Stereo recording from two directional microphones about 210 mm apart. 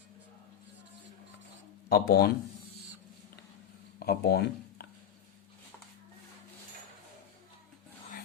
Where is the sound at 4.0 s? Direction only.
50° left (ahead or behind).